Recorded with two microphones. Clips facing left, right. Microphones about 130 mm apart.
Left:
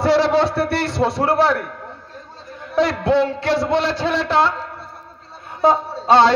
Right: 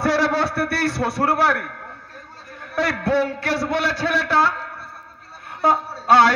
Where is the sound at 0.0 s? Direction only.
20° left (ahead or behind).